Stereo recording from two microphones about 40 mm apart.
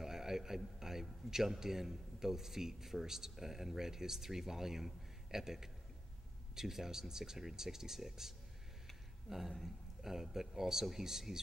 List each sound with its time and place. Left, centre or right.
0.0 s a sound: centre
0.7 s a man's voice: centre
10.0 s a man's voice: centre